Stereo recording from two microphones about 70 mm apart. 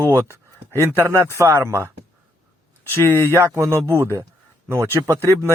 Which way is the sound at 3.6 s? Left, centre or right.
Right.